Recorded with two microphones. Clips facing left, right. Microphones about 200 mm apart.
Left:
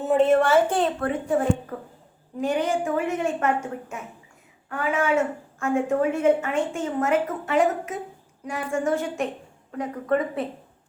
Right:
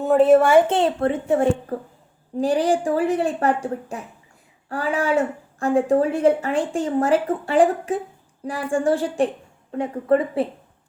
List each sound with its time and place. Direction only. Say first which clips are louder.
0.0 s speech: right 4 dB; centre (ahead or behind)
0.5 s speech: right 4 dB; 25° right (ahead or behind)